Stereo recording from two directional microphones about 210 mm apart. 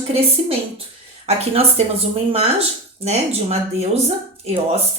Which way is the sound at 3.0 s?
30° right (ahead or behind).